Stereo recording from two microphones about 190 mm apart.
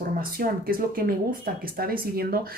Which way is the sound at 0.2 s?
50° right (ahead or behind).